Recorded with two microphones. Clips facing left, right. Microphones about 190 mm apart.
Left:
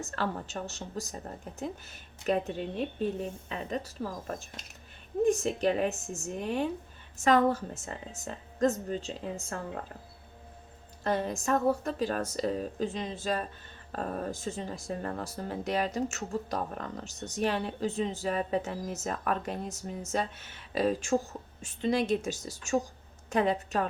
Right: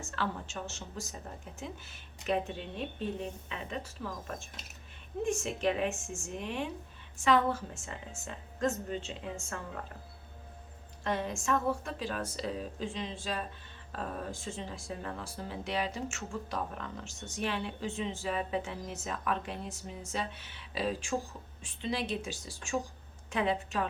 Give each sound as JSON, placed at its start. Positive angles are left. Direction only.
{"t": 0.0, "sound": "a woman's voice", "side_deg": 40}
{"t": 11.0, "sound": "speech", "side_deg": 40}